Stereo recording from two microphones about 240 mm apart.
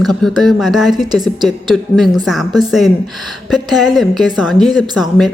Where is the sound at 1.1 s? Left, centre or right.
Centre.